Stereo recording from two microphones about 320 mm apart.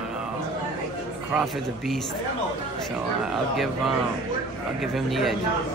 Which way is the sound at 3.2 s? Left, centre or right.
Centre.